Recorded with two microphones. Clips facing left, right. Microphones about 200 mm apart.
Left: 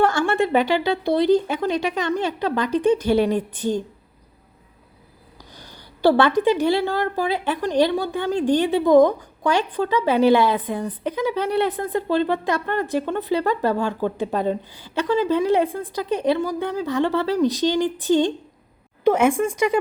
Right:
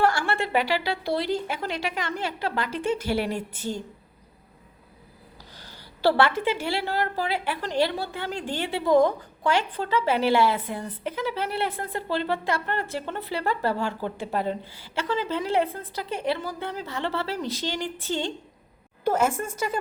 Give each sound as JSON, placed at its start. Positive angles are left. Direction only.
{"t": 0.0, "sound": "a woman's voice", "side_deg": 20}
{"t": 5.5, "sound": "a woman's voice", "side_deg": 15}